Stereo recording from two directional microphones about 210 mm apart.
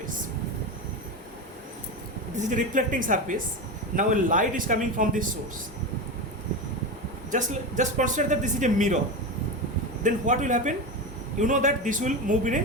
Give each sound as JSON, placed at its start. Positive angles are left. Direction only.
{"t": 2.3, "sound": "speech", "side_deg": -35}
{"t": 7.3, "sound": "speech", "side_deg": -35}
{"t": 10.0, "sound": "speech", "side_deg": -35}